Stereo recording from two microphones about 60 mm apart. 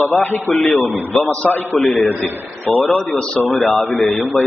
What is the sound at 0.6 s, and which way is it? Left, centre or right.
Speech, centre.